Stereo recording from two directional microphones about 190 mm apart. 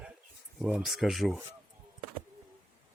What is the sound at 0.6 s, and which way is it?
Speech, centre (ahead or behind).